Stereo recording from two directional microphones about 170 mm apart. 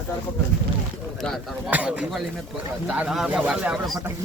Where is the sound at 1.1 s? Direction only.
Centre (ahead or behind).